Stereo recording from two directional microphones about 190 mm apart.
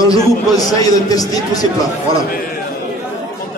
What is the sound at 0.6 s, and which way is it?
A man's voice, 20° left (ahead or behind).